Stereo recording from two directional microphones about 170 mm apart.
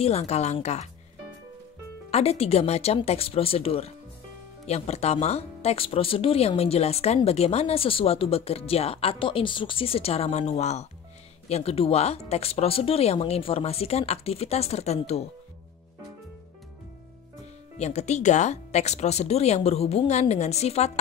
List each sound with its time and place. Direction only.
0.0 s speech: 40° left (ahead or behind)
2.0 s speech: 35° left (ahead or behind)
17.7 s speech: 40° left (ahead or behind)